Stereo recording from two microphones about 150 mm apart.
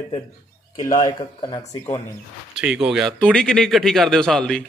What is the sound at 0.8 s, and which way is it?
Speech, 25° left (ahead or behind).